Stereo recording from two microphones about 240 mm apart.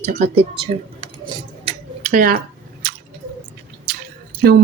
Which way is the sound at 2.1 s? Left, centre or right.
Right.